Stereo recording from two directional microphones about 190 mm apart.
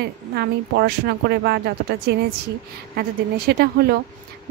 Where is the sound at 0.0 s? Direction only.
55° right (ahead or behind).